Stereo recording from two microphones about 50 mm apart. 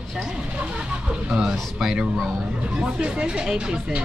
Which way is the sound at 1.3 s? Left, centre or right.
Centre.